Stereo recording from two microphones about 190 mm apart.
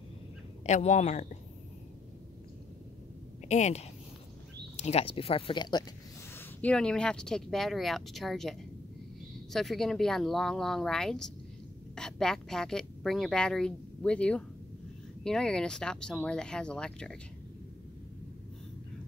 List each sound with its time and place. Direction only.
0.7 s speech: 35° left (ahead or behind)
3.4 s speech: 35° left (ahead or behind)
6.3 s speech: 5° left (ahead or behind)